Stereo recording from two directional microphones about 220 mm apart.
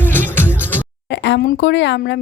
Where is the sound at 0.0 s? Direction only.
10° left (ahead or behind).